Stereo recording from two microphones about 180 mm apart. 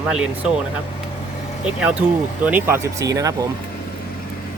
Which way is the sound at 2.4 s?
10° right (ahead or behind).